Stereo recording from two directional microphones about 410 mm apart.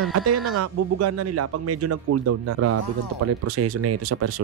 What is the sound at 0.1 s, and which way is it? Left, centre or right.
Speech, right.